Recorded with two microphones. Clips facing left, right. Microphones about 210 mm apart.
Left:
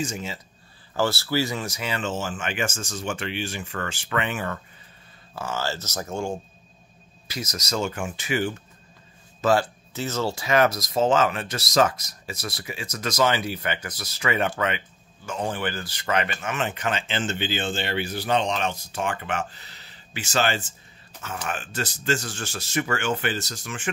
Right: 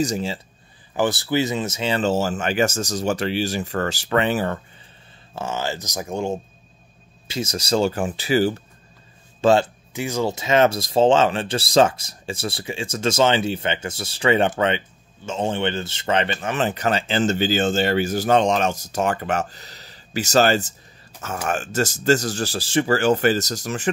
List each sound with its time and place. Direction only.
0.0 s speech: 35° right (ahead or behind)
0.9 s speech: 15° right (ahead or behind); by 4.6 s 35° right (ahead or behind)
5.3 s a man's voice: 20° right (ahead or behind)
9.9 s speech: 15° right (ahead or behind); by 23.9 s 40° right (ahead or behind)